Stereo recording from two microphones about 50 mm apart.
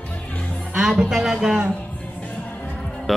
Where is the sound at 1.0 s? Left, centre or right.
Centre.